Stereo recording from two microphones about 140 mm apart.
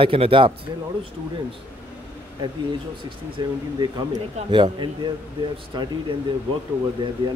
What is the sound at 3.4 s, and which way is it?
A man's voice, 30° right (ahead or behind).